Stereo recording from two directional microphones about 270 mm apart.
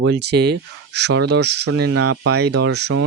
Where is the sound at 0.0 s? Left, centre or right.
Right.